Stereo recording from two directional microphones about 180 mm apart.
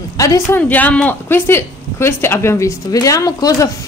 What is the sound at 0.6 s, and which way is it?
Speech, 10° left (ahead or behind).